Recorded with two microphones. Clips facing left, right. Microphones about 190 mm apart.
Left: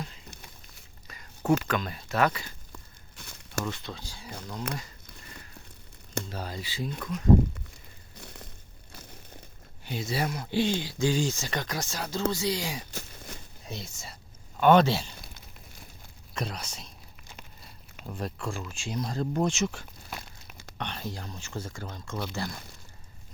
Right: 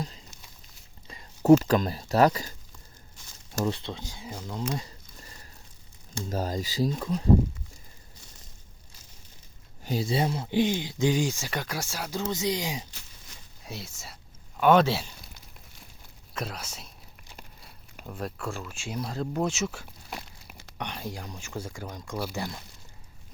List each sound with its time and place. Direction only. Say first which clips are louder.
1.0 s speech: right 8 dB; 25° right (ahead or behind)
2.7 s a sound: left 5 dB; 60° left (ahead or behind)
3.6 s speech: right 5 dB; 30° right (ahead or behind)
6.2 s speech: right 7 dB; 40° right (ahead or behind)
8.1 s a sound: left 8 dB; 60° left (ahead or behind)
9.8 s speech: right 4 dB; 35° right (ahead or behind); by 12.8 s 15° right (ahead or behind)
12.9 s a sound: left 10 dB; 50° left (ahead or behind)
13.7 s speech: even; 5° right (ahead or behind)
16.3 s speech: left 1 dB; 5° right (ahead or behind)
18.0 s speech: even; 5° right (ahead or behind)